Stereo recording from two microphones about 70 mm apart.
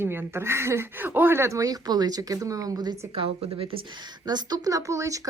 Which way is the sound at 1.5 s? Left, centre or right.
Right.